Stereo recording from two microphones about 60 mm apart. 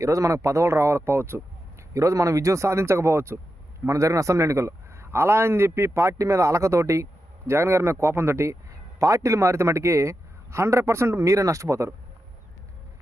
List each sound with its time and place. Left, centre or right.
0.0 s speech: right
1.9 s speech: right
3.8 s a man's voice: right
9.0 s a man's voice: right